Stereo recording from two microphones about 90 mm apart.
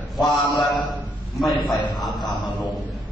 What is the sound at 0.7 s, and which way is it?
Speech, 55° left (ahead or behind).